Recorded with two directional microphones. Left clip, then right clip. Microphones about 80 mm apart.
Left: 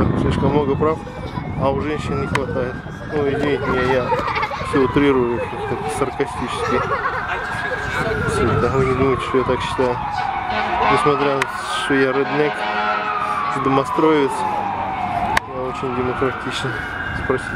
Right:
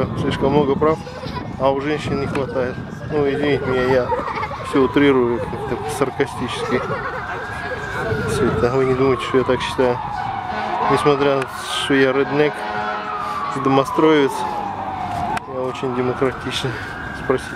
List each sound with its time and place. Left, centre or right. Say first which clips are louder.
0.2 s speech: right 5 dB; right
3.3 s speech: left 1 dB; right
6.6 s speech: left 3 dB; left
8.7 s speech: right 1 dB; right
10.5 s police car: left 2 dB; left
11.1 s speech: right 1 dB; right
12.7 s a sound: left 4 dB; left
13.7 s speech: right 2 dB; right